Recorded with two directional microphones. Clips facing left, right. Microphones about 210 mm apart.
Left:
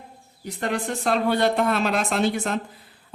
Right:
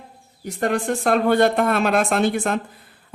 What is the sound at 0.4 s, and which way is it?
Speech, 50° right (ahead or behind).